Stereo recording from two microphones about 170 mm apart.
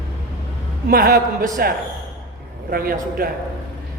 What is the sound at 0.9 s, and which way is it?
Speech, 60° right (ahead or behind).